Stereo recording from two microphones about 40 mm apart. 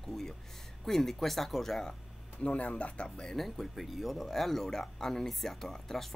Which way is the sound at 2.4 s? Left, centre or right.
Left.